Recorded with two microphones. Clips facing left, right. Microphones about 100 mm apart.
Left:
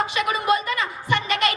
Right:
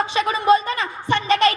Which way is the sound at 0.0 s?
30° right (ahead or behind).